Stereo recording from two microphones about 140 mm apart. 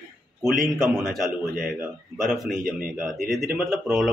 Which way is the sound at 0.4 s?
Centre (ahead or behind).